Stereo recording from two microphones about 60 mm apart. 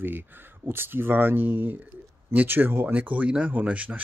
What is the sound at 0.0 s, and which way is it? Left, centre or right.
Speech, right.